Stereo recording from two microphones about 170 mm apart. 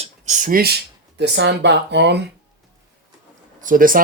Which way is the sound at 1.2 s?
90° right.